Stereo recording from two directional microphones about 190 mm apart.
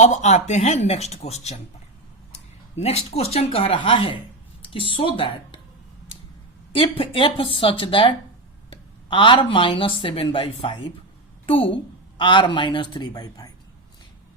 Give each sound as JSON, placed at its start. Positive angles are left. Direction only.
{"t": 0.0, "sound": "speech", "side_deg": 35}
{"t": 2.7, "sound": "speech", "side_deg": 35}
{"t": 6.7, "sound": "speech", "side_deg": 30}